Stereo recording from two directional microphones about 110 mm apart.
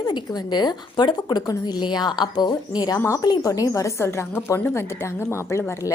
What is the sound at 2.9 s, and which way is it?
A woman's voice, 25° left (ahead or behind).